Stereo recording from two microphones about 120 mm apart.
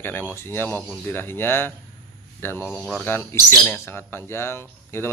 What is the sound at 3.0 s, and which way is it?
Speech, 20° left (ahead or behind).